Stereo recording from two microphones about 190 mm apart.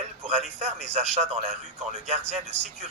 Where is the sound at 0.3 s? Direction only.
35° right (ahead or behind).